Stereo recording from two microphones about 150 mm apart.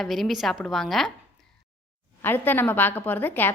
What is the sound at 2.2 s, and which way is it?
A woman's voice, 15° left (ahead or behind).